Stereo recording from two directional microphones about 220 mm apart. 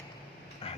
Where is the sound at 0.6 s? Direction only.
25° left (ahead or behind).